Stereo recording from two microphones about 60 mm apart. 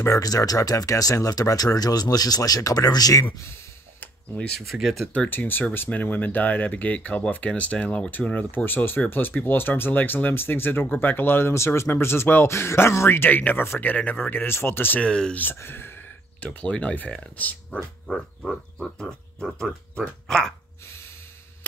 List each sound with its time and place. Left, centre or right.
0.2 s speech: left
4.6 s speech: centre
5.3 s speech: left
8.5 s speech: left
13.2 s speech: left
15.0 s speech: centre
15.5 s speech: left
16.6 s speech: left
18.0 s a sound: centre
19.4 s speech: centre